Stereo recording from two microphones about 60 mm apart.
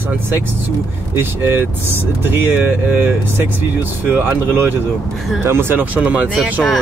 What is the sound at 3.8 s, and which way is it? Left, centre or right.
Speech, right.